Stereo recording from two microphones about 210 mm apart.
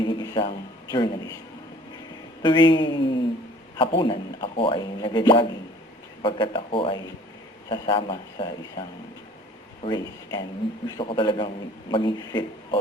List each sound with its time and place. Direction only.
0.0 s a sound: 20° left (ahead or behind)
2.4 s a man's voice: 20° left (ahead or behind)
9.8 s a man's voice: 20° left (ahead or behind)